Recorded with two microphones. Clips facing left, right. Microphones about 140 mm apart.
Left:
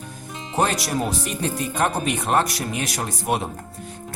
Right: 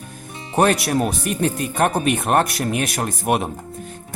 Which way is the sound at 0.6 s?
60° right (ahead or behind).